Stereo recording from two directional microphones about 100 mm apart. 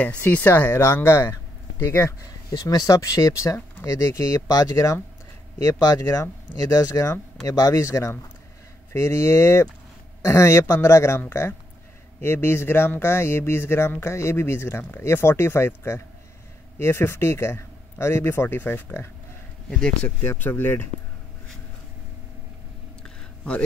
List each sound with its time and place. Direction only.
0.0 s speech: 15° left (ahead or behind)
2.6 s speech: 35° left (ahead or behind)
20.2 s speech: 20° left (ahead or behind)
23.0 s a sound: 10° left (ahead or behind)